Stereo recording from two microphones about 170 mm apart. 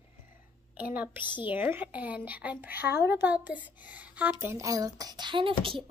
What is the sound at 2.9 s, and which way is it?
Speech, 85° left.